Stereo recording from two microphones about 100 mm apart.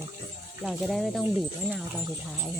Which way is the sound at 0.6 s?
Centre (ahead or behind).